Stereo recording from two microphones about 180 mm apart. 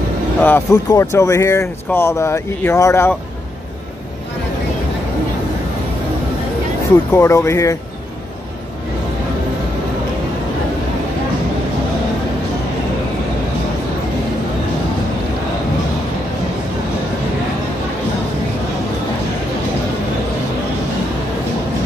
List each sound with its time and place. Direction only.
0.4 s speech: 10° left (ahead or behind)
7.1 s speech: 15° left (ahead or behind)